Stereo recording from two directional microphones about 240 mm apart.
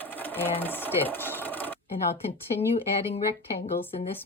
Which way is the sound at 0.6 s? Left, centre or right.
Centre.